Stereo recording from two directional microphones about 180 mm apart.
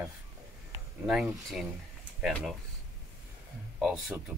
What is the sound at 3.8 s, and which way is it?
Speech, 5° right (ahead or behind).